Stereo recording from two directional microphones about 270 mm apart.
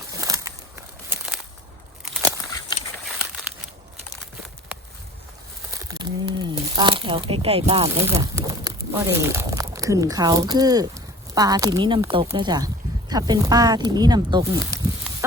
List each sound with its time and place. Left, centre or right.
0.1 s crumpling: centre
5.8 s speech: centre
7.9 s speech: centre